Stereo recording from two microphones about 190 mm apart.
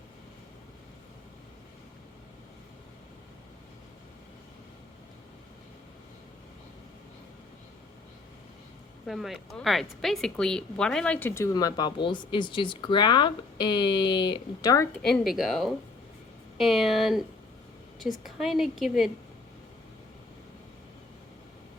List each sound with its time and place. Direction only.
9.0 s a woman's voice: centre (ahead or behind); by 14.8 s 20° left (ahead or behind)
15.0 s a woman's voice: centre (ahead or behind)